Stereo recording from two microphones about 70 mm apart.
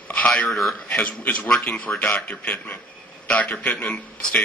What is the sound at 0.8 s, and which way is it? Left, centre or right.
A man's voice, left.